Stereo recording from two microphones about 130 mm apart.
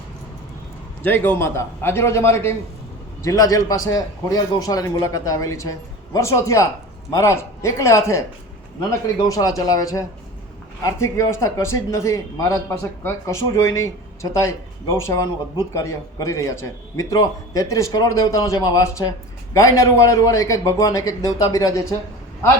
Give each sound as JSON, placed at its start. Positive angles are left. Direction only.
{"t": 1.0, "sound": "a man's voice", "side_deg": 15}